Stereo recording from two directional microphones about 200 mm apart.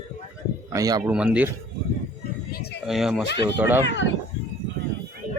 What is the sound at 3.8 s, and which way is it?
Speech, 65° left (ahead or behind).